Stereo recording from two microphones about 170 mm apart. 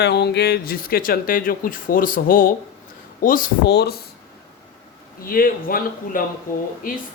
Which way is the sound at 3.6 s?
80° left.